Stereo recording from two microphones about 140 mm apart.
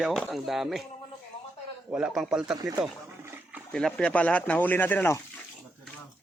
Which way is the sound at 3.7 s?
5° left (ahead or behind).